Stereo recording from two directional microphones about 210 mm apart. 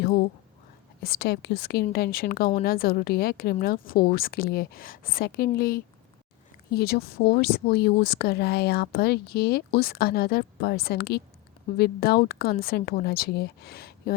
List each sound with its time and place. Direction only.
1.0 s speech: 45° left (ahead or behind)